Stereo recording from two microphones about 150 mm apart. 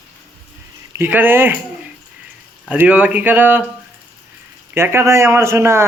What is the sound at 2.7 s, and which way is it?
Speech, 10° right (ahead or behind).